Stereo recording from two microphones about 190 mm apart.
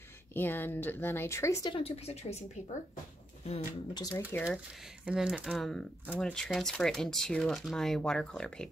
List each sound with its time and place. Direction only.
0.3 s speech: 10° left (ahead or behind)
1.7 s speech: 30° left (ahead or behind)
3.4 s speech: 30° left (ahead or behind)
4.3 s speech: 10° left (ahead or behind)
5.0 s speech: 5° right (ahead or behind)